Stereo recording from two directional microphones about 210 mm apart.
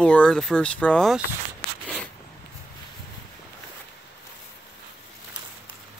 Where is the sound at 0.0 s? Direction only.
5° left (ahead or behind).